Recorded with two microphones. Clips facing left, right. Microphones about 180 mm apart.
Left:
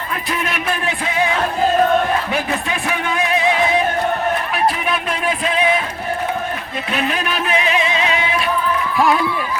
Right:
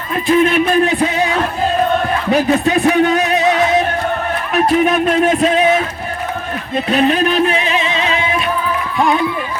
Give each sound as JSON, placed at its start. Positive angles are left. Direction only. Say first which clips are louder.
{"t": 0.3, "sound": "music", "louder": "right 12 dB", "side_deg": -30}
{"t": 2.3, "sound": "music", "louder": "right 9 dB", "side_deg": -40}
{"t": 4.5, "sound": "a sound", "louder": "right 7 dB", "side_deg": -45}
{"t": 6.7, "sound": "music", "louder": "right 9 dB", "side_deg": -35}